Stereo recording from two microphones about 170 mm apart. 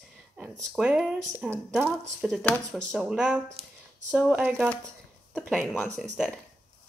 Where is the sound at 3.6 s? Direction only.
35° right (ahead or behind).